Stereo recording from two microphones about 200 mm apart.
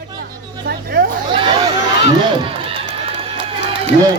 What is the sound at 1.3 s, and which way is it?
Chatter, 25° right (ahead or behind).